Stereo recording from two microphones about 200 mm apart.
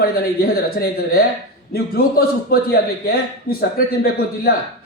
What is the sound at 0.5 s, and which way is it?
A man's voice, 50° left (ahead or behind).